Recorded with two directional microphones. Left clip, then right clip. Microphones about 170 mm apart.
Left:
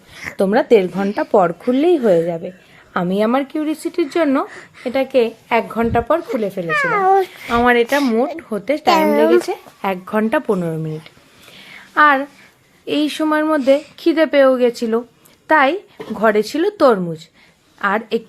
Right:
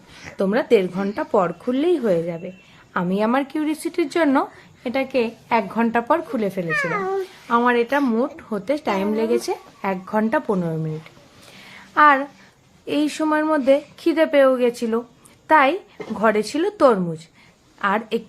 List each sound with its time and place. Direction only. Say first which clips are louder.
0.3 s speech: left 5 dB; 25° left (ahead or behind)
6.7 s speech: left 11 dB; 50° left (ahead or behind)
7.5 s speech: left 4 dB; 20° left (ahead or behind)
11.5 s a sound: left 3 dB; 15° left (ahead or behind)
12.8 s a woman's voice: left 3 dB; 15° left (ahead or behind)